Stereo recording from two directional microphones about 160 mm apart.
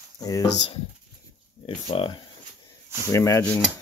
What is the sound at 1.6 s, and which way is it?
Speech, 35° left (ahead or behind).